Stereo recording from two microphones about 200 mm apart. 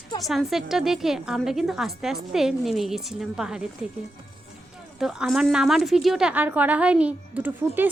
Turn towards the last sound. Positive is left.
turn(degrees=-10)  # may be behind; listen again after turning